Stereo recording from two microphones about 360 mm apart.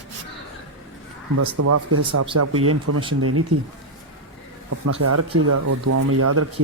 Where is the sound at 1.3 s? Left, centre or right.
Right.